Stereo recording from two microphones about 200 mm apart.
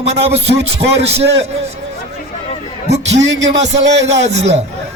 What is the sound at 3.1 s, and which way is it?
A man's voice, 65° right (ahead or behind).